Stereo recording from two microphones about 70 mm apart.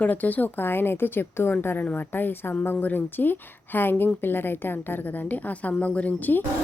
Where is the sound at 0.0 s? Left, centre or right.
Left.